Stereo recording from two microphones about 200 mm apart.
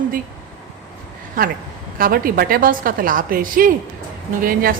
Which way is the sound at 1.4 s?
45° right (ahead or behind).